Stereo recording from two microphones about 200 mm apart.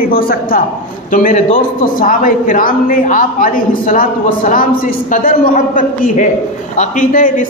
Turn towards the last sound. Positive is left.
turn(degrees=40)  # may be behind; listen again after turning